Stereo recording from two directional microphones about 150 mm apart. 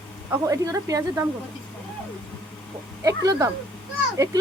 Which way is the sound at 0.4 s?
20° right (ahead or behind).